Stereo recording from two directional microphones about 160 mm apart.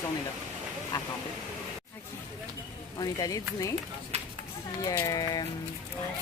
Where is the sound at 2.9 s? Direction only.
25° left (ahead or behind).